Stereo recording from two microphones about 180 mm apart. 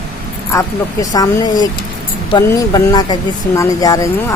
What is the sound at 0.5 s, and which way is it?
Music, 20° left (ahead or behind).